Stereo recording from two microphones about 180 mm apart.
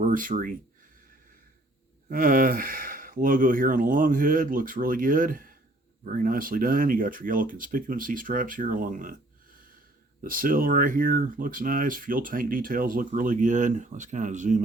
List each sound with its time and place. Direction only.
0.0 s speech: 45° right (ahead or behind)
2.0 s speech: 50° right (ahead or behind)
10.2 s speech: 50° right (ahead or behind)